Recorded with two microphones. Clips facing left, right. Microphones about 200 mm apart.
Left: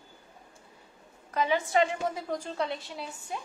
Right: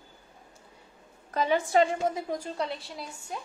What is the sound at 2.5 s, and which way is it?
Speech, centre (ahead or behind).